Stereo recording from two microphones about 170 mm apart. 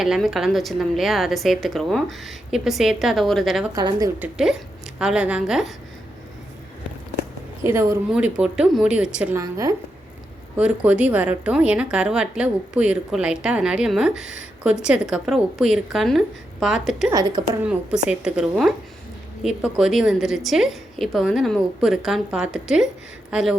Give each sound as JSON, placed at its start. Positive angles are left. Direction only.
{"t": 0.0, "sound": "a woman's voice", "side_deg": -5}
{"t": 3.8, "sound": "a woman's voice", "side_deg": -20}
{"t": 4.2, "sound": "a woman's voice", "side_deg": -5}
{"t": 7.6, "sound": "speech", "side_deg": -15}
{"t": 8.1, "sound": "a woman's voice", "side_deg": -5}
{"t": 9.4, "sound": "a woman's voice", "side_deg": -20}
{"t": 10.6, "sound": "a woman's voice", "side_deg": -10}
{"t": 17.1, "sound": "a woman's voice", "side_deg": -20}
{"t": 17.5, "sound": "a woman's voice", "side_deg": -5}